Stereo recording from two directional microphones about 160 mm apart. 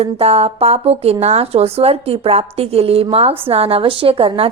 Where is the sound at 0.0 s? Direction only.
40° right (ahead or behind).